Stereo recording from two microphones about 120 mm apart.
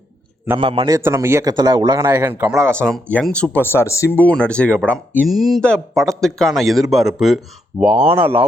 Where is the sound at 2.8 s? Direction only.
10° left (ahead or behind); by 8.1 s 5° right (ahead or behind).